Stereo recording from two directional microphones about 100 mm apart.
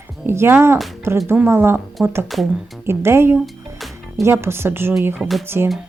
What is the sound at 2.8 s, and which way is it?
Speech, 25° right (ahead or behind).